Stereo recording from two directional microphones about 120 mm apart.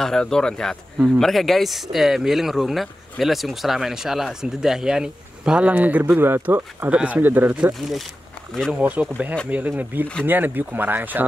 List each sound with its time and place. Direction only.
0.0 s speech: 5° left (ahead or behind); by 11.2 s 15° right (ahead or behind)